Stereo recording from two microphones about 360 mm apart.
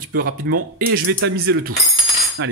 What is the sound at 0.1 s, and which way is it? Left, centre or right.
Speech, right.